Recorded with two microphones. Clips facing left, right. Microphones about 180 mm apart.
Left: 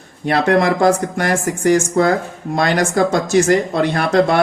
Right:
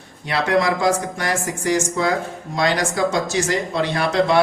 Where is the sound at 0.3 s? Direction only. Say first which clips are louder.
Left 5 dB; 50° left (ahead or behind).